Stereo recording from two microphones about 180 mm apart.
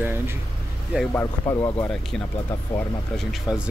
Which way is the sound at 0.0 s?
15° right (ahead or behind).